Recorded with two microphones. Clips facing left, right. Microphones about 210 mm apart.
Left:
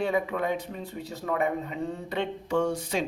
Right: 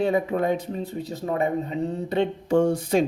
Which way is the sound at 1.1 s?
20° right (ahead or behind).